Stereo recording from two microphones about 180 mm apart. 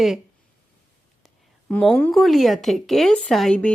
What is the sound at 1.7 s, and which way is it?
Speech, 5° left (ahead or behind).